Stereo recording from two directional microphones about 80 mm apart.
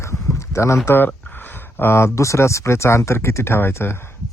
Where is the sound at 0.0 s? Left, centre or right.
Left.